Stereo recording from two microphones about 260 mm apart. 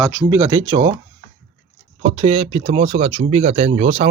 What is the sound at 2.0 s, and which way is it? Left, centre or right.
Speech, right.